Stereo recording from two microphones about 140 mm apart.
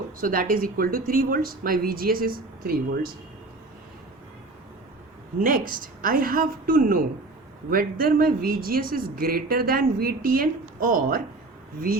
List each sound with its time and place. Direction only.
0.2 s speech: 90° right
5.4 s a woman's voice: 85° right